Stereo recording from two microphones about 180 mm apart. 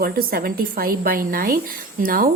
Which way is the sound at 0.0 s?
55° right (ahead or behind).